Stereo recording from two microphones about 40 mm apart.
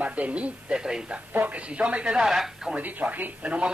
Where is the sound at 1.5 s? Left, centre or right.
Right.